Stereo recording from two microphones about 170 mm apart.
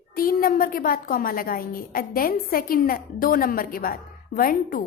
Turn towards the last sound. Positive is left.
turn(degrees=55)  # may be behind; listen again after turning